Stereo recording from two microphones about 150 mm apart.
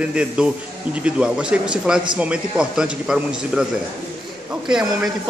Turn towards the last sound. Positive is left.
turn(degrees=-5)  # may be behind; listen again after turning